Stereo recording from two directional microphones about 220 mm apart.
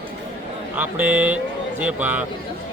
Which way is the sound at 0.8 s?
10° right (ahead or behind).